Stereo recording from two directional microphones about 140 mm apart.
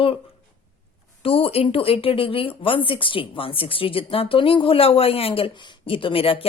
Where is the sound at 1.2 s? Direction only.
40° left (ahead or behind).